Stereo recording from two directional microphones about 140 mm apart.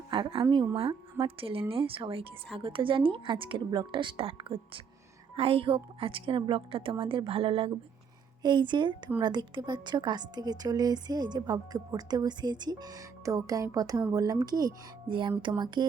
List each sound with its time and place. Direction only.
0.1 s a woman's voice: 35° right (ahead or behind)